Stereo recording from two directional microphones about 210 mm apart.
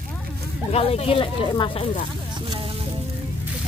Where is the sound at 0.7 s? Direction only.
30° left (ahead or behind).